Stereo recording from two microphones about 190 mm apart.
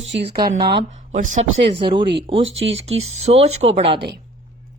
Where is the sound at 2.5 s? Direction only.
85° right.